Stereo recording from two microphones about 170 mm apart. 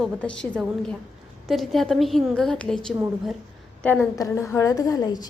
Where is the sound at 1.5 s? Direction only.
Centre (ahead or behind).